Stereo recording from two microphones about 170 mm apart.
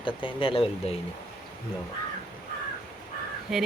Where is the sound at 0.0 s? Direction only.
30° left (ahead or behind).